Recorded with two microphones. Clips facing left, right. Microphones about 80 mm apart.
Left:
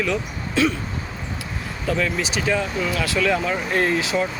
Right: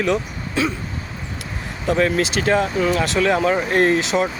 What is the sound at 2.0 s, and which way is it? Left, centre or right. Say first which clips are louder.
Speech: right 8 dB; right.